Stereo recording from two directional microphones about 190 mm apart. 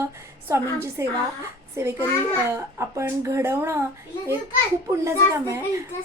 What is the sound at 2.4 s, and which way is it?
A woman's voice, 15° right (ahead or behind).